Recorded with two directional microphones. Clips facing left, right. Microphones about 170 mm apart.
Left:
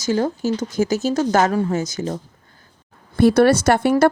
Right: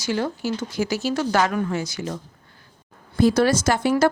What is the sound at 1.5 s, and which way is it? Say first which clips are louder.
Speech: left 4 dB; 30° left (ahead or behind).